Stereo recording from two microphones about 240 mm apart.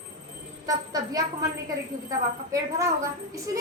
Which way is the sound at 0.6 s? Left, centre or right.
Centre.